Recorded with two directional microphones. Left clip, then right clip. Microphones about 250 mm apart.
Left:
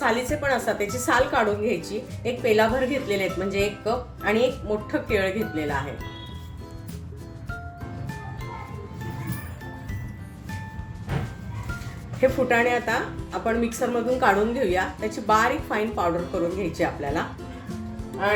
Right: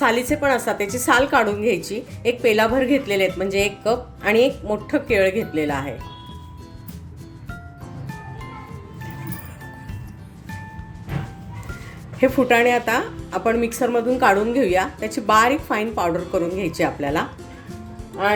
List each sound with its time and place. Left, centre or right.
0.0 s speech: right
12.2 s a woman's voice: right